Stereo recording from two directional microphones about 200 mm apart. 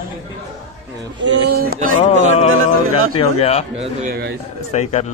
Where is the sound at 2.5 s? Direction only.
90° right.